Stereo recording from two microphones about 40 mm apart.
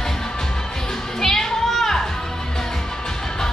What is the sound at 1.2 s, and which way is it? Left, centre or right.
Children playing, centre.